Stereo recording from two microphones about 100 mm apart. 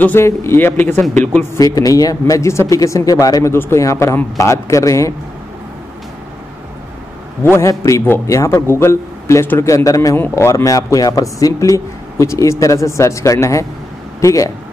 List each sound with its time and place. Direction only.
0.0 s a man's voice: 25° left (ahead or behind)
1.5 s speech: 35° left (ahead or behind)
3.5 s a man's voice: 25° left (ahead or behind)
7.5 s a man's voice: 30° left (ahead or behind)